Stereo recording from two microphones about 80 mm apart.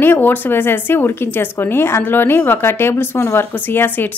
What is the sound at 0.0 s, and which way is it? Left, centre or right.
A woman's voice, left.